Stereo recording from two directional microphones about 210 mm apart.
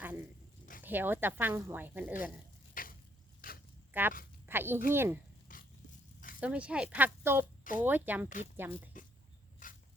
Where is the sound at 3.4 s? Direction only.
40° left (ahead or behind).